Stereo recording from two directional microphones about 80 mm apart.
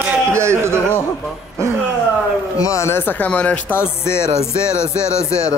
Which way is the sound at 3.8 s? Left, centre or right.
Left.